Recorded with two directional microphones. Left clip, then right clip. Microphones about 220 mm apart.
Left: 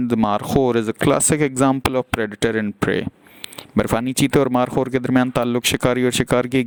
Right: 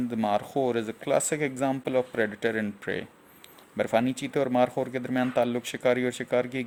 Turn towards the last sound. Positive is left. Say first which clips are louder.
# left 9 dB
turn(degrees=45)  # may be behind; listen again after turning